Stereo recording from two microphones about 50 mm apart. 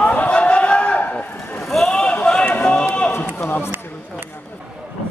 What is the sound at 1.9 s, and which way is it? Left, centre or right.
Run, left.